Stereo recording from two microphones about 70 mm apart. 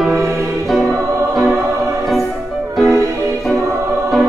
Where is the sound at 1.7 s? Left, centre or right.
Right.